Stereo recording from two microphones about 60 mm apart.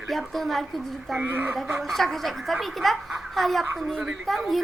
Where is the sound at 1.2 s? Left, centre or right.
Right.